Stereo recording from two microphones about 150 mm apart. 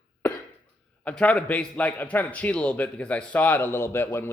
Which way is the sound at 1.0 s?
10° left (ahead or behind).